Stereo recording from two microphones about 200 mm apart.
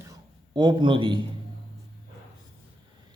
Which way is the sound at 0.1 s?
20° right (ahead or behind).